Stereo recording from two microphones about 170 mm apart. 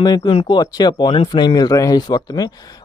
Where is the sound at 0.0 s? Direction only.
25° left (ahead or behind).